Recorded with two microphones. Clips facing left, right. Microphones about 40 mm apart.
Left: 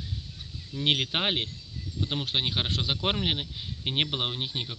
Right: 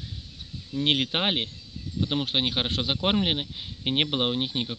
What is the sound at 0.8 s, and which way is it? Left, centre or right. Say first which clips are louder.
Speech: right 2 dB; centre.